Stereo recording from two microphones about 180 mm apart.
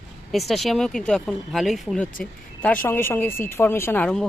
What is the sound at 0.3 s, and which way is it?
Speech, centre (ahead or behind).